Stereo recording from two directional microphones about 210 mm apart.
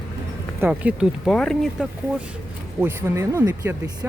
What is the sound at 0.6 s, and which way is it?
Speech, 5° right (ahead or behind).